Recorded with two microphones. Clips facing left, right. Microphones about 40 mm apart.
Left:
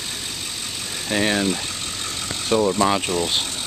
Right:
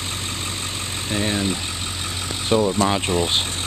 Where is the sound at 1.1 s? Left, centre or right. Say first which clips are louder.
Left 3 dB; left.